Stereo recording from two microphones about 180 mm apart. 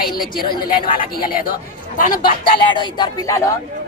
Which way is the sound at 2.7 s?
20° left (ahead or behind).